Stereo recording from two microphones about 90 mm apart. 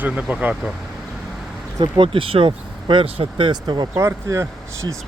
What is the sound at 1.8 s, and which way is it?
Speech, 70° right (ahead or behind).